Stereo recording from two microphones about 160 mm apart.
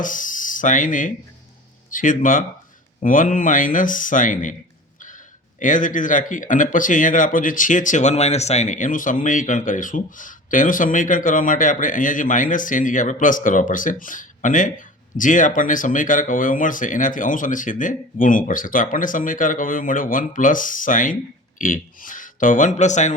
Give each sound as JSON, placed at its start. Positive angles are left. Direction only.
{"t": 0.0, "sound": "speech", "side_deg": 55}